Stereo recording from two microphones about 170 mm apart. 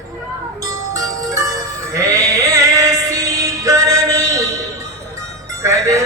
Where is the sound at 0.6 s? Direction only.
20° right (ahead or behind).